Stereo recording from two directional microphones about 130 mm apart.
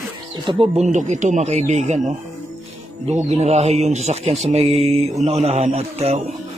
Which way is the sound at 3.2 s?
55° right (ahead or behind).